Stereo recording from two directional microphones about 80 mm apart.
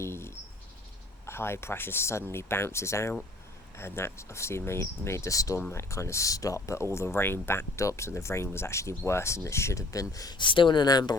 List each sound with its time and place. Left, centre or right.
0.0 s cricket: left
1.3 s speech: left
10.3 s speech: left